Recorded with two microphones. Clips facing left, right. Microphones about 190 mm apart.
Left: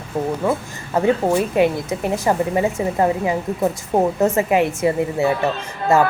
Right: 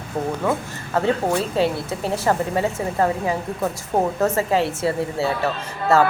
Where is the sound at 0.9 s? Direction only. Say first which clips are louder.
Left 3 dB; 15° left (ahead or behind).